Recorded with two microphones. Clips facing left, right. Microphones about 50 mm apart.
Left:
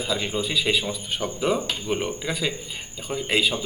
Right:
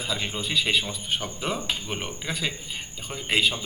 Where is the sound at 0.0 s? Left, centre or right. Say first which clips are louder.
Left 4 dB; centre.